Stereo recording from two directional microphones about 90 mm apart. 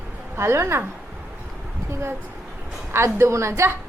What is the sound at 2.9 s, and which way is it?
Speech, 30° right (ahead or behind).